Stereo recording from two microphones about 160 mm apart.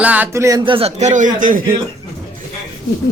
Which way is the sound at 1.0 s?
50° right (ahead or behind).